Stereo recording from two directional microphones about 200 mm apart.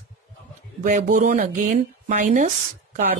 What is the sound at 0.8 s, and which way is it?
A woman's voice, 40° right (ahead or behind).